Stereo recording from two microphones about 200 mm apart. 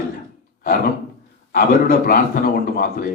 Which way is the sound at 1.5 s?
50° left (ahead or behind).